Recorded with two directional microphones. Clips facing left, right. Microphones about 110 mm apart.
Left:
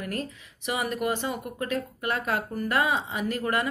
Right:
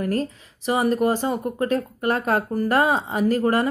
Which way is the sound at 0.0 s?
35° right (ahead or behind).